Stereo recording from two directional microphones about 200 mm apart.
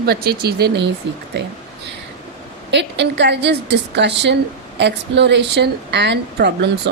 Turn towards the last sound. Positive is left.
turn(degrees=-60)  # may be behind; listen again after turning